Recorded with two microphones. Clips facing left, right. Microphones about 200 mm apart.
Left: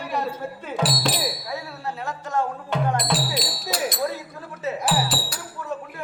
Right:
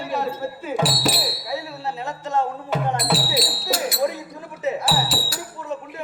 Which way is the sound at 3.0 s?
5° right (ahead or behind).